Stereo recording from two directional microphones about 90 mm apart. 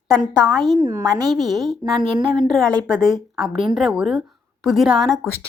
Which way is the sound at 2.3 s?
Centre (ahead or behind).